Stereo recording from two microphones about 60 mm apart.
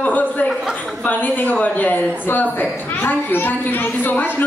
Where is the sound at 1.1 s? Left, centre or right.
Left.